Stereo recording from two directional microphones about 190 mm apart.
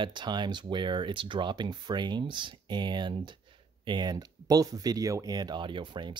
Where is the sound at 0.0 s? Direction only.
25° right (ahead or behind).